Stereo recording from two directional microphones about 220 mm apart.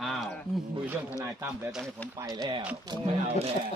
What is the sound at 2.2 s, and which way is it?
Speech, 15° right (ahead or behind).